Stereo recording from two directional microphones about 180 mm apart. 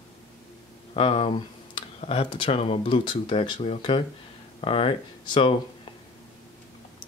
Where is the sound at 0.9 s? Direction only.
30° left (ahead or behind).